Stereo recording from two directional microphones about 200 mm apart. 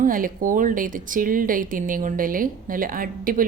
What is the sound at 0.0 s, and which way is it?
Speech, 45° right (ahead or behind).